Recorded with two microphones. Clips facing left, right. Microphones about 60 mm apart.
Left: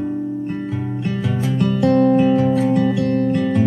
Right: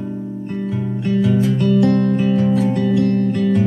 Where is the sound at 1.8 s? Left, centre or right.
Centre.